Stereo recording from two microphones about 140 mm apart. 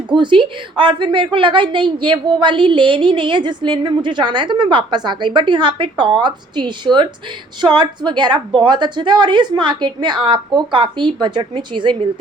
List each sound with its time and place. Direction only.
0.1 s a woman's voice: 35° right (ahead or behind)